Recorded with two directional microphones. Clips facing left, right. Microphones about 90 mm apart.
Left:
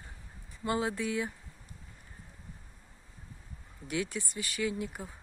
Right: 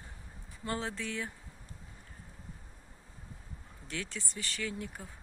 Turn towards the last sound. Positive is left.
turn(degrees=10)  # may be behind; listen again after turning